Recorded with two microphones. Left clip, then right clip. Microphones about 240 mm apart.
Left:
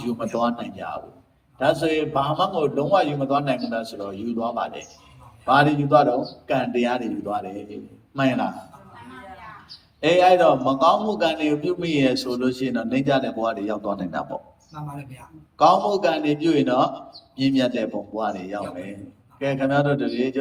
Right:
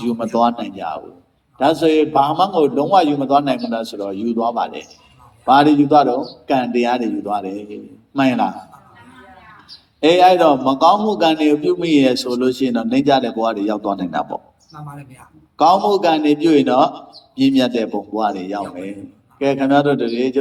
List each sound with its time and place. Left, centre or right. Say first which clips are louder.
0.0 s a man's voice: right 7 dB; centre
10.0 s a man's voice: right 5 dB; centre